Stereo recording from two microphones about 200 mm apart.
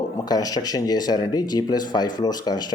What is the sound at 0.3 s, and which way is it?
Speech, 20° left (ahead or behind).